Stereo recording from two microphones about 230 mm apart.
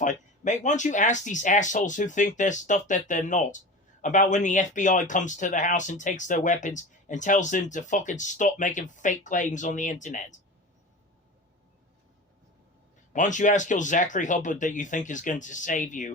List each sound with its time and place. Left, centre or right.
0.0 s speech: left
13.1 s speech: left